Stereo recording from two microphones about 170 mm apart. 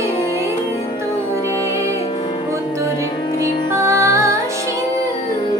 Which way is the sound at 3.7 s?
15° right (ahead or behind).